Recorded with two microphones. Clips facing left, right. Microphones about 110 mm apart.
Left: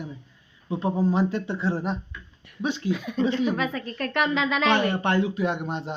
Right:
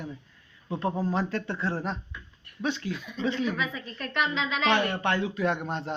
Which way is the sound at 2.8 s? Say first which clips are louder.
Left 6 dB; 60° left (ahead or behind).